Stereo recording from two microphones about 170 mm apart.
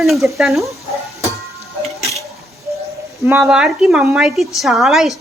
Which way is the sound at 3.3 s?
5° right (ahead or behind).